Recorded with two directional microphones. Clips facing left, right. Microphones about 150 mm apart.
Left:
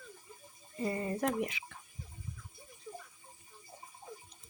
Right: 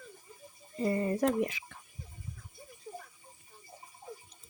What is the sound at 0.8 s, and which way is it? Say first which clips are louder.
Speech: right 5 dB; 40° right (ahead or behind).